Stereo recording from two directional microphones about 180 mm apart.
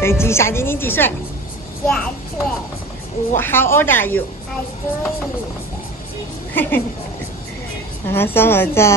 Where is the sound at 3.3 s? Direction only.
10° left (ahead or behind).